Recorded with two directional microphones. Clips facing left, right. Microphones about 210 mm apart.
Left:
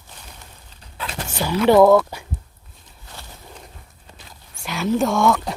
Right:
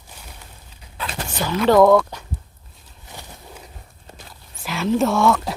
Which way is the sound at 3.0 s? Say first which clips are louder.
Right 2 dB; 15° right (ahead or behind).